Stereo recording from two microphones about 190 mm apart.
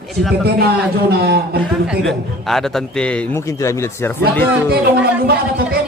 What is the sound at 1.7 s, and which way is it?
A man's voice, centre (ahead or behind).